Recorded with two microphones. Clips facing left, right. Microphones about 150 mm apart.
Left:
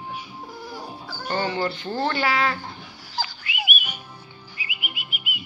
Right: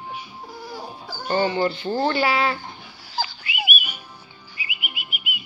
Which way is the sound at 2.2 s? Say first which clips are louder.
Right 2 dB; 10° right (ahead or behind).